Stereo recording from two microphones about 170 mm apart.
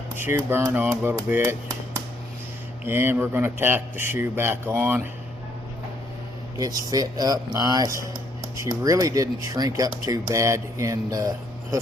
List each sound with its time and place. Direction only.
0.2 s speech: 10° right (ahead or behind)
2.8 s speech: 15° right (ahead or behind)
6.6 s speech: 20° right (ahead or behind)